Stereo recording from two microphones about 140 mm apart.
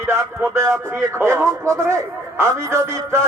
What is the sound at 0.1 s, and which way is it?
Speech, 20° right (ahead or behind).